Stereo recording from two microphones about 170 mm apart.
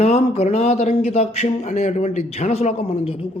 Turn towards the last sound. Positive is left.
turn(degrees=35)  # may be behind; listen again after turning